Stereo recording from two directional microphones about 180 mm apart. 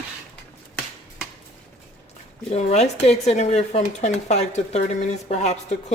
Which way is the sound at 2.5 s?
35° left (ahead or behind).